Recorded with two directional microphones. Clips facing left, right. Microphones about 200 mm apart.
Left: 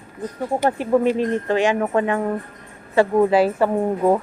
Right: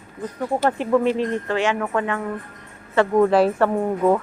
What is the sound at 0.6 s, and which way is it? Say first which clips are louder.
Speech: left 1 dB; 15° left (ahead or behind).